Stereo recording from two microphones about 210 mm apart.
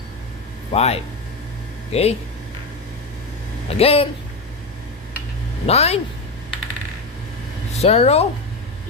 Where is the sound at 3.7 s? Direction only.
25° left (ahead or behind).